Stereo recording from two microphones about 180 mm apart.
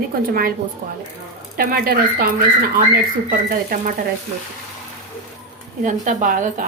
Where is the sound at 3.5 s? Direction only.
55° right (ahead or behind).